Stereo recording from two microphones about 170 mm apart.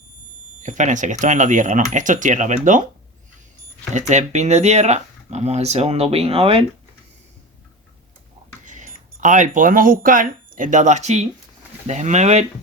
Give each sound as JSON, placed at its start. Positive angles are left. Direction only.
{"t": 0.6, "sound": "speech", "side_deg": -45}
{"t": 3.9, "sound": "speech", "side_deg": -45}
{"t": 8.6, "sound": "speech", "side_deg": -45}